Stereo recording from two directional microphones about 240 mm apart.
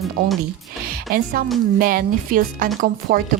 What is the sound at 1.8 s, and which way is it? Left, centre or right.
Speech, right.